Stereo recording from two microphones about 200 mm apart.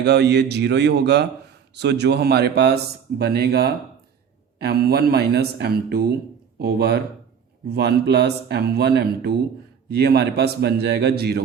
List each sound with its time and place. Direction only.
0.0 s a man's voice: 55° right (ahead or behind)